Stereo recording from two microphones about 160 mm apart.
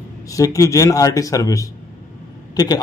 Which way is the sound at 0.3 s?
20° left (ahead or behind).